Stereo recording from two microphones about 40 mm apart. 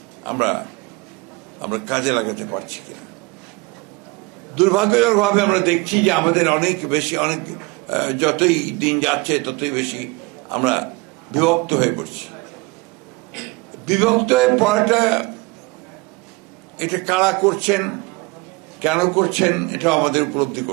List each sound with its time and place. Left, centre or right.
0.3 s a man's voice: centre
4.5 s a man's voice: centre
13.3 s a sound: centre
16.7 s a man's voice: centre